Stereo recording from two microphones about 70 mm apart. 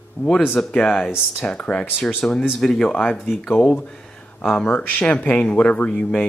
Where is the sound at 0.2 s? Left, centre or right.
Left.